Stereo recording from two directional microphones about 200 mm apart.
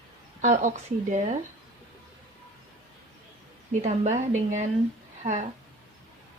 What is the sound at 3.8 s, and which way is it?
A woman's voice, 35° right (ahead or behind).